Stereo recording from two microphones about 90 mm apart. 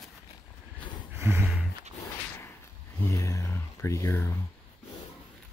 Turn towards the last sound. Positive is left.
turn(degrees=30)  # may be behind; listen again after turning